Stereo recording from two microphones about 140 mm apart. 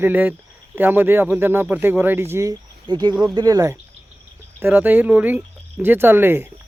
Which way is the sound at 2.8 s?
30° right (ahead or behind).